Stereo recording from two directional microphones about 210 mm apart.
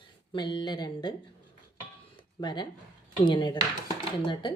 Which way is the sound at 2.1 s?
20° left (ahead or behind).